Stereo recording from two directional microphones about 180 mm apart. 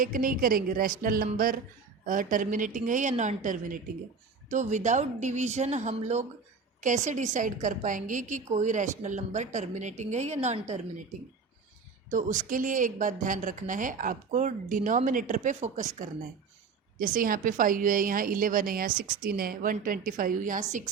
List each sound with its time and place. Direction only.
0.0 s a woman's voice: 50° right (ahead or behind)
12.1 s a woman's voice: 45° right (ahead or behind)